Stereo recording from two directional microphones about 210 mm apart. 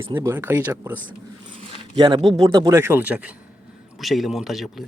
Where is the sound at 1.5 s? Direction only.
25° right (ahead or behind).